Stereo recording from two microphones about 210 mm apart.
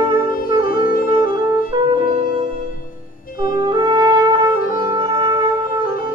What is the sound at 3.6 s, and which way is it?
Music, 20° right (ahead or behind).